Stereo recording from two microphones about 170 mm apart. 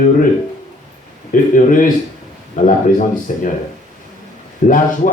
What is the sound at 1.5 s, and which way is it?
Speech, 50° left (ahead or behind).